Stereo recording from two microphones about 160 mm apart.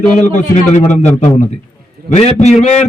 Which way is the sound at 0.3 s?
45° left (ahead or behind).